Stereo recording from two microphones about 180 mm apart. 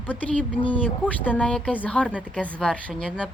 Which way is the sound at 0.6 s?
30° left (ahead or behind).